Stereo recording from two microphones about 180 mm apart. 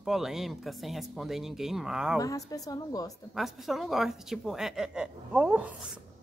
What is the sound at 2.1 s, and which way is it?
Speech, 20° left (ahead or behind).